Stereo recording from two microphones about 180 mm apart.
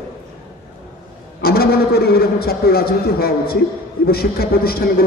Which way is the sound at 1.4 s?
60° left (ahead or behind).